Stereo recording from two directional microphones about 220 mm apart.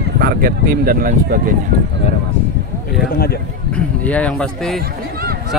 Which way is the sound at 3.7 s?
5° left (ahead or behind).